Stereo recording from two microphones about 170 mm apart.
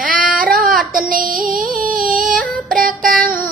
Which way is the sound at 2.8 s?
55° right (ahead or behind).